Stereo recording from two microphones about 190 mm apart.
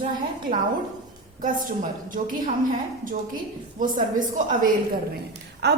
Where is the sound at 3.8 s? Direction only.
45° right (ahead or behind).